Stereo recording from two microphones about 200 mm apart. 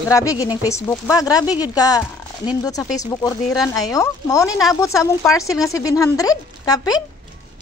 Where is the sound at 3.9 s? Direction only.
15° left (ahead or behind).